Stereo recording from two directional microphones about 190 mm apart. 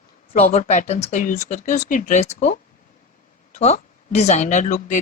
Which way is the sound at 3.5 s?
35° left (ahead or behind).